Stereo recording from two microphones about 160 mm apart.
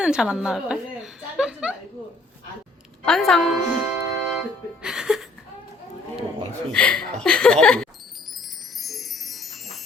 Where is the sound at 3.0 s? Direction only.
5° left (ahead or behind).